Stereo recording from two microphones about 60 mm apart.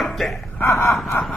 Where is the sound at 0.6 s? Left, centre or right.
Left.